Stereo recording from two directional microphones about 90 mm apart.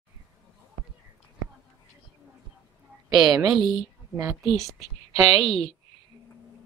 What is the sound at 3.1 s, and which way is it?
Speech, 5° right (ahead or behind).